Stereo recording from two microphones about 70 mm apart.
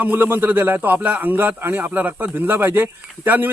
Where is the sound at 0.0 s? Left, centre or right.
Right.